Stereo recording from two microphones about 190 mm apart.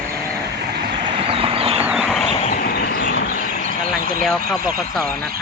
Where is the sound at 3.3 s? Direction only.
40° left (ahead or behind).